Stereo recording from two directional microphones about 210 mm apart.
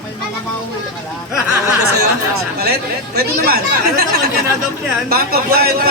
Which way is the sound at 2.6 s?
50° right (ahead or behind).